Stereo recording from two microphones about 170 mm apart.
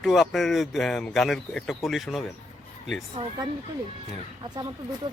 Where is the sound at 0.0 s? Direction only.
Centre (ahead or behind).